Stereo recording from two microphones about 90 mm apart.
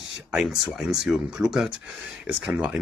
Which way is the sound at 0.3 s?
5° right (ahead or behind).